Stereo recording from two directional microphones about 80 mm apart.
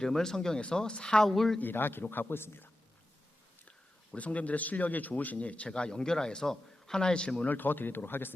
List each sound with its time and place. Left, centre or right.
0.0 s speech: centre
1.5 s speech: left
3.7 s speech: centre
7.5 s speech: left